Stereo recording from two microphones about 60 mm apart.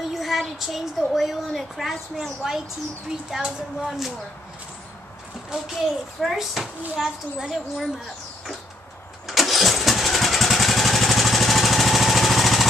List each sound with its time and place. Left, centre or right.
0.1 s a child's voice: centre
5.5 s a child's voice: centre
9.3 s engine starting: centre